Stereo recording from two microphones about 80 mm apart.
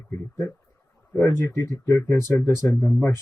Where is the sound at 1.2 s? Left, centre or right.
Left.